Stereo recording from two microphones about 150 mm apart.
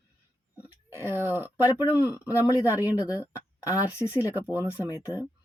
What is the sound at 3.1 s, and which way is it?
Speech, 20° left (ahead or behind).